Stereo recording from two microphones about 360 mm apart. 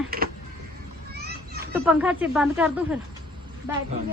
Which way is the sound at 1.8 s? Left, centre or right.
Centre.